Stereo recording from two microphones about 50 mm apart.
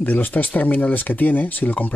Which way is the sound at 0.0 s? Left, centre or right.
Left.